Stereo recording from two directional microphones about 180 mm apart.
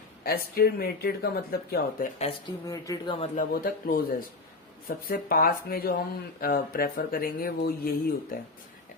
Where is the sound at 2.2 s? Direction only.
30° left (ahead or behind).